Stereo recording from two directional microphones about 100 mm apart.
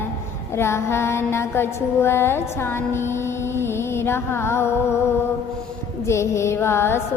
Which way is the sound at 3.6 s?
25° left (ahead or behind).